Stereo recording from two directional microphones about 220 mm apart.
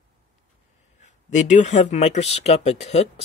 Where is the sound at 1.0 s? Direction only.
35° left (ahead or behind).